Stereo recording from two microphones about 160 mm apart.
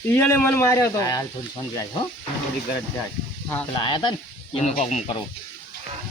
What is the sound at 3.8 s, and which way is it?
Speech, 30° left (ahead or behind).